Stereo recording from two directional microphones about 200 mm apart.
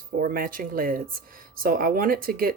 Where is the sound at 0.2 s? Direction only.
45° right (ahead or behind).